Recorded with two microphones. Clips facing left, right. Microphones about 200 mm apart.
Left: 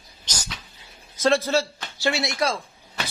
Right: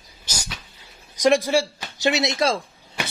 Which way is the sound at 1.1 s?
15° right (ahead or behind).